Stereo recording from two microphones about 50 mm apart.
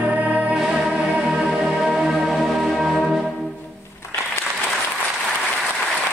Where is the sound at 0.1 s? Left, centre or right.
Right.